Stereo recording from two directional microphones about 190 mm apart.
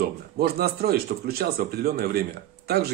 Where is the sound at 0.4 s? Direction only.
55° right (ahead or behind).